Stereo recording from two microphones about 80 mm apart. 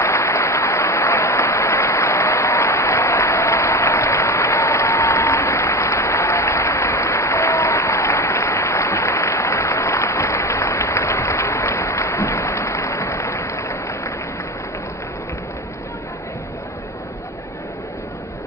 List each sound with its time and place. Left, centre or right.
0.0 s applause: left